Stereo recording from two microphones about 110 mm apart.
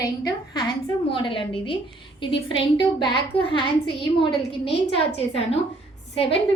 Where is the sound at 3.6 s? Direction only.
50° left (ahead or behind).